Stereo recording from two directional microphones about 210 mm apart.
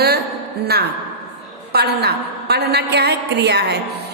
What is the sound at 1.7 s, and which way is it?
A woman's voice, 50° right (ahead or behind).